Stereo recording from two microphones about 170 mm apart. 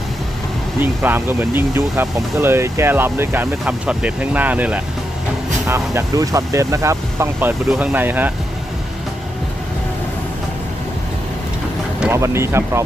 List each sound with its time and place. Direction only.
0.8 s speech: 10° right (ahead or behind)
12.1 s speech: 15° right (ahead or behind)